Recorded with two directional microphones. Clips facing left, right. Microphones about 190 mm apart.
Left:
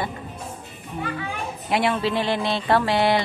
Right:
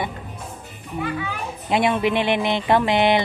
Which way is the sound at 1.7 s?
20° right (ahead or behind).